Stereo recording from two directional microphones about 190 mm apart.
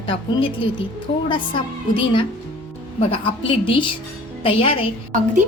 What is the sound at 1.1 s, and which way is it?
Music, 30° left (ahead or behind).